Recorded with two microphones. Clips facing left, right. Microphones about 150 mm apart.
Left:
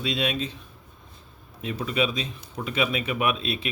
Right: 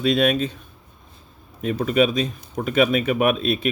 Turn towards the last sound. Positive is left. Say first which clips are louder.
# right 7 dB
turn(degrees=-45)  # may be behind; listen again after turning